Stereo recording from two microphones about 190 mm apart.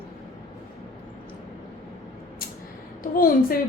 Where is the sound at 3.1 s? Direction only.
50° left (ahead or behind).